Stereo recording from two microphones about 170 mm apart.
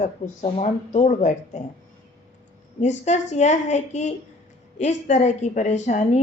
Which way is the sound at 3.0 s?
40° left (ahead or behind).